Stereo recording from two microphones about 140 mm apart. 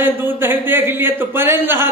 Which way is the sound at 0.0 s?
15° right (ahead or behind).